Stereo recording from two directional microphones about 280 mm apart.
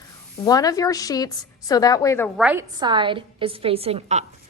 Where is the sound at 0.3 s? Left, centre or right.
Centre.